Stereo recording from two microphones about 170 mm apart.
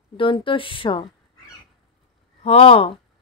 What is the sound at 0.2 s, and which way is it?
Speech, 30° left (ahead or behind).